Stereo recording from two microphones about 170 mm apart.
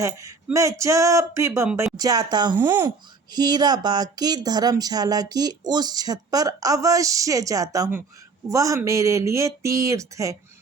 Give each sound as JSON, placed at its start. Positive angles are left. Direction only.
{"t": 0.0, "sound": "speech", "side_deg": -20}
{"t": 2.6, "sound": "speech", "side_deg": -15}
{"t": 3.3, "sound": "speech", "side_deg": -25}